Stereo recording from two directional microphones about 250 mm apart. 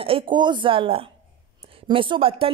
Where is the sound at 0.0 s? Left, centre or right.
Centre.